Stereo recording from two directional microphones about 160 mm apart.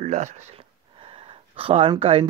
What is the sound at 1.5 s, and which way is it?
Speech, 35° right (ahead or behind).